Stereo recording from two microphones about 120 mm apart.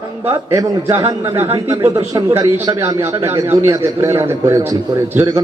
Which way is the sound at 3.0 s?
20° right (ahead or behind).